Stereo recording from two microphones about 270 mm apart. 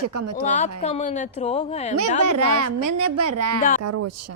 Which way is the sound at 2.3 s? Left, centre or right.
Right.